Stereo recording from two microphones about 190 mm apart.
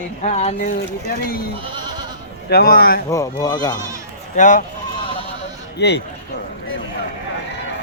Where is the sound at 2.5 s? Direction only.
55° left (ahead or behind).